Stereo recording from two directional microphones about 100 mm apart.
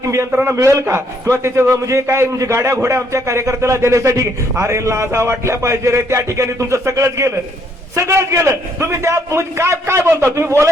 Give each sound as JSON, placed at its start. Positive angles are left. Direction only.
{"t": 0.0, "sound": "a man's voice", "side_deg": -30}
{"t": 0.3, "sound": "a man's voice", "side_deg": -15}
{"t": 0.5, "sound": "a man's voice", "side_deg": -30}